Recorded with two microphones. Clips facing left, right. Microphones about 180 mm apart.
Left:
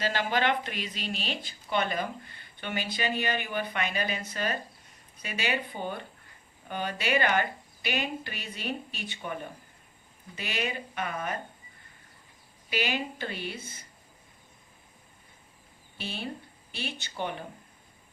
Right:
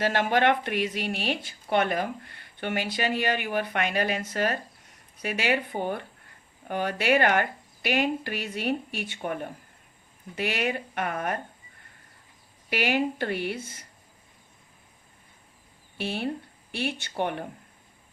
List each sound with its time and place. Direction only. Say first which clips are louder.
0.0 s speech: right 5 dB; 65° right (ahead or behind)
12.7 s speech: right 6 dB; 70° right (ahead or behind)
16.0 s speech: right 7 dB; 65° right (ahead or behind)